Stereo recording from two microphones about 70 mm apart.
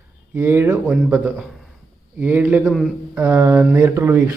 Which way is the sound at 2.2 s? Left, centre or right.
Right.